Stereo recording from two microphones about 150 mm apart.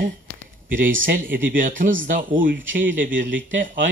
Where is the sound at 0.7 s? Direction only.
65° right (ahead or behind).